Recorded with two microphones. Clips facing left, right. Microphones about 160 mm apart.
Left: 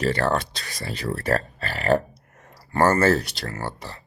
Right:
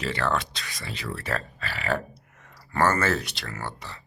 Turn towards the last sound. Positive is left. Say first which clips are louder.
# left 4 dB
turn(degrees=35)  # may be behind; listen again after turning